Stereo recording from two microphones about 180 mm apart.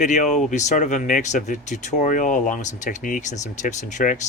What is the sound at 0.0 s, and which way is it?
Speech, 40° left (ahead or behind).